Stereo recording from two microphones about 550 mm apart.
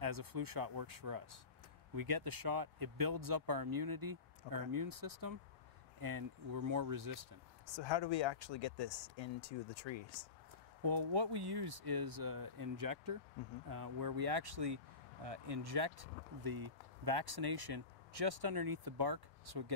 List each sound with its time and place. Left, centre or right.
0.0 s speech: right
7.7 s speech: left
10.8 s speech: right